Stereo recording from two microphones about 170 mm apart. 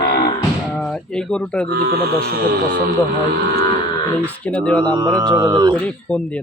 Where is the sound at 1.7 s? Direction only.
65° right (ahead or behind).